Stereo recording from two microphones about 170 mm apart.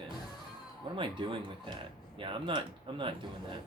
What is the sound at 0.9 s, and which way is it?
Speech, 30° right (ahead or behind).